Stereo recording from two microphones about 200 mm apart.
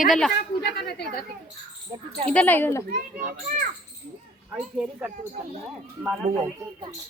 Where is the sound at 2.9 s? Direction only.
40° right (ahead or behind).